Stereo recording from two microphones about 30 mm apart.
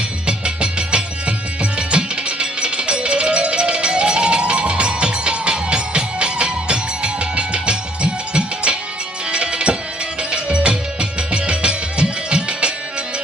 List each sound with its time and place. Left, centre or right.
0.3 s music: right